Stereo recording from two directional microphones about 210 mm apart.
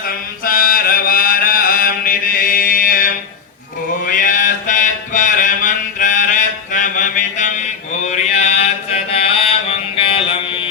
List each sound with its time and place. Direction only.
0.0 s chant: 40° left (ahead or behind)
4.0 s mantra: 40° left (ahead or behind)